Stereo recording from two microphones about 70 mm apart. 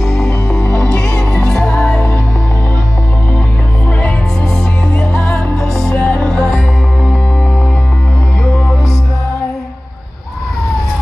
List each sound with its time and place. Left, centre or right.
0.0 s music: centre
0.3 s music: left
0.9 s music: centre
4.9 s music: centre
8.5 s music: left